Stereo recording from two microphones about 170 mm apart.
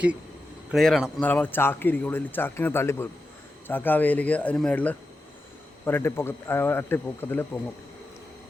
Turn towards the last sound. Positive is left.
turn(degrees=10)  # may be behind; listen again after turning